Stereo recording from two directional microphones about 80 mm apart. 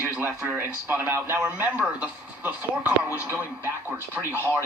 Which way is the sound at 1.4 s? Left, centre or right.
Centre.